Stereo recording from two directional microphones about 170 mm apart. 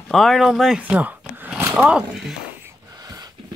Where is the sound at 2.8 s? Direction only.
20° right (ahead or behind).